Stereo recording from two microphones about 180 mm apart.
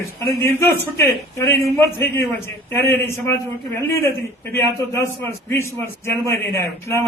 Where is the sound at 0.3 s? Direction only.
15° left (ahead or behind).